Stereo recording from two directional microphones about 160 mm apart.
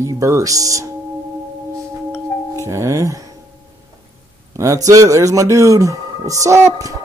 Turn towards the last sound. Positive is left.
turn(degrees=-20)  # may be behind; listen again after turning